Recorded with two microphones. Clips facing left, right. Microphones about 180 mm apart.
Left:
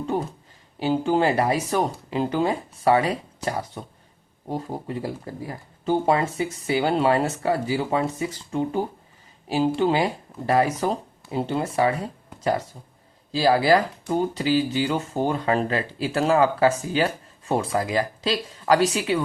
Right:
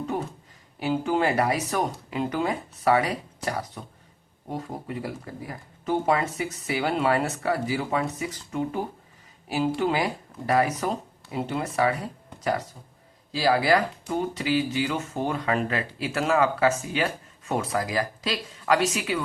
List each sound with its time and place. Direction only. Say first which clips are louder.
0.1 s speech: left 4 dB; 30° left (ahead or behind)